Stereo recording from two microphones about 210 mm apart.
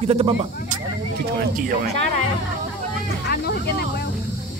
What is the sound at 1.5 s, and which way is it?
Speech, 45° right (ahead or behind).